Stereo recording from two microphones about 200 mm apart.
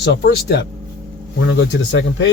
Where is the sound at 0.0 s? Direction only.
55° left (ahead or behind).